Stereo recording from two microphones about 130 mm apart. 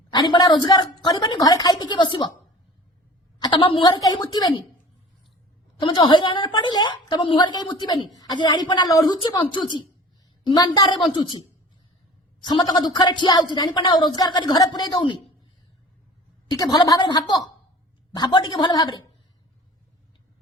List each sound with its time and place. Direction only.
0.1 s a woman's voice: 35° left (ahead or behind)
3.4 s a woman's voice: 40° left (ahead or behind)
5.8 s a woman's voice: 40° left (ahead or behind)
12.4 s a woman's voice: 35° left (ahead or behind)
16.5 s a woman's voice: 30° left (ahead or behind)